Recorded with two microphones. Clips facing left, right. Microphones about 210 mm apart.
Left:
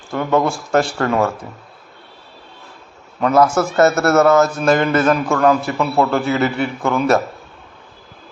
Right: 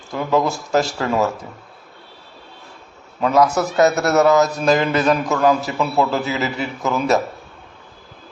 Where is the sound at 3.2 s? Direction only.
Centre (ahead or behind).